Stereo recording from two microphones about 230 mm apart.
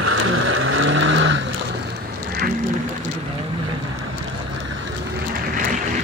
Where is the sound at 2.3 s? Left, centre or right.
Right.